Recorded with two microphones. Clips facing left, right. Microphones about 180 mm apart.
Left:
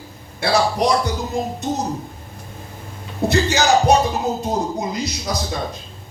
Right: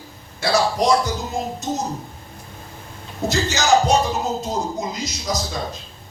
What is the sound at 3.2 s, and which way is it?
Speech, 60° left (ahead or behind).